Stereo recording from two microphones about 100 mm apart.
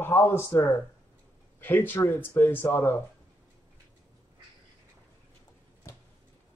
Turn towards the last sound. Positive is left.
turn(degrees=30)  # may be behind; listen again after turning